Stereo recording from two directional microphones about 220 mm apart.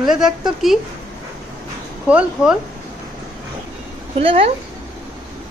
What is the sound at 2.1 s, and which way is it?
Speech, 5° right (ahead or behind).